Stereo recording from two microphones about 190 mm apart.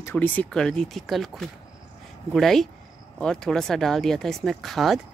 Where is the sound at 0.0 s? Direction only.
10° left (ahead or behind).